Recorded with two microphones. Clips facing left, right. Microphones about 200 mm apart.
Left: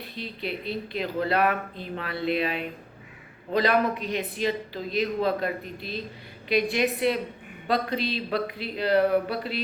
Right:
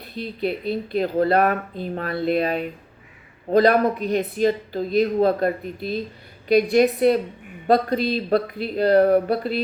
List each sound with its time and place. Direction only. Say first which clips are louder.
0.9 s speech: right 7 dB; 45° right (ahead or behind)